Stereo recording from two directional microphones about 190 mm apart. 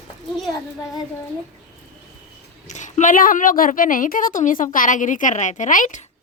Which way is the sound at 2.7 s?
40° left (ahead or behind).